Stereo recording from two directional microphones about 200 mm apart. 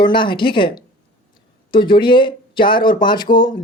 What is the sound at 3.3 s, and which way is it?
Speech, 45° left (ahead or behind).